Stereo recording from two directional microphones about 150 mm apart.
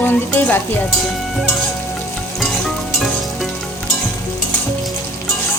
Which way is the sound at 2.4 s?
Centre (ahead or behind).